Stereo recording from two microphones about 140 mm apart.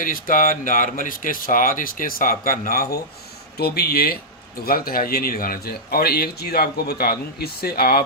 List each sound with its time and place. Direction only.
0.0 s a man's voice: 75° left (ahead or behind)